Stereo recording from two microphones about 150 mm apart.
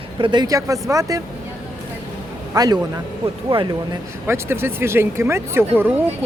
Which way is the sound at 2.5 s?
25° right (ahead or behind).